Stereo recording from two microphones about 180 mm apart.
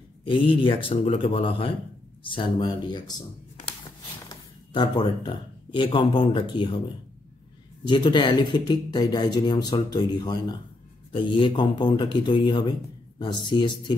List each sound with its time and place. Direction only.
0.2 s a man's voice: 30° left (ahead or behind)
4.7 s speech: 25° left (ahead or behind)
7.8 s speech: 25° left (ahead or behind)